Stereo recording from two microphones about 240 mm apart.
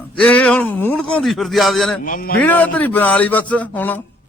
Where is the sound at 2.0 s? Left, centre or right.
Left.